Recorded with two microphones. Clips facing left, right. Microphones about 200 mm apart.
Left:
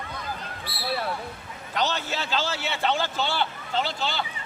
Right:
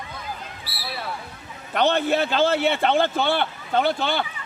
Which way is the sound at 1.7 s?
55° right (ahead or behind).